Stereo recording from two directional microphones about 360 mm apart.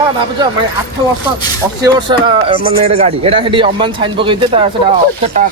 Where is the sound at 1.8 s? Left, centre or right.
Centre.